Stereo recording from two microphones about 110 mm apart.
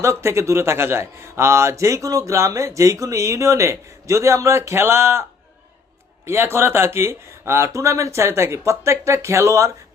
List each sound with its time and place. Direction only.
0.0 s a man's voice: 25° right (ahead or behind)
6.2 s a man's voice: 25° right (ahead or behind)